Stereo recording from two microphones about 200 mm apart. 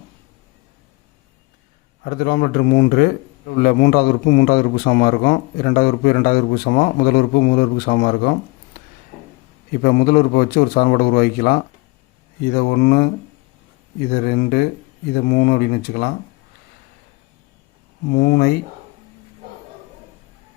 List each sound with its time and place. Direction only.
2.0 s a man's voice: 50° left (ahead or behind)
8.7 s a sound: 50° left (ahead or behind)
9.8 s a man's voice: 45° left (ahead or behind)
14.1 s a man's voice: 50° left (ahead or behind)
18.1 s a man's voice: 50° left (ahead or behind)